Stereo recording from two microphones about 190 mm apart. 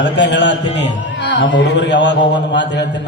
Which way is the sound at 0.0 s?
65° left (ahead or behind).